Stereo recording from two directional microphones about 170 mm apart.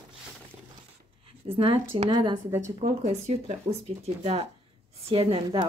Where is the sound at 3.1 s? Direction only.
40° right (ahead or behind).